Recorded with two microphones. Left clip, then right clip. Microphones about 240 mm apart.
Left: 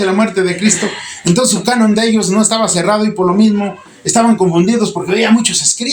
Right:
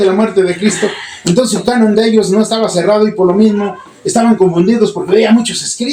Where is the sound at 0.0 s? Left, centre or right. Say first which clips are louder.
Right 3 dB; left.